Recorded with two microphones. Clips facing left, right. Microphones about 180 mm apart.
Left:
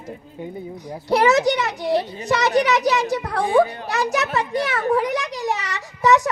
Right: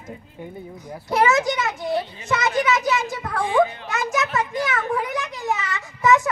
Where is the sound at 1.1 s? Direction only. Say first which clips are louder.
Left 3 dB; 35° left (ahead or behind).